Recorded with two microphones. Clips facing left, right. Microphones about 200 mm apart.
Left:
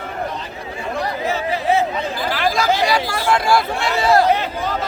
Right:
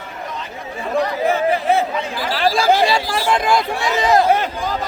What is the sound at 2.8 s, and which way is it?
Speech, 25° right (ahead or behind).